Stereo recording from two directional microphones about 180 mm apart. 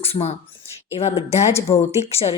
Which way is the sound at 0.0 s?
35° left (ahead or behind).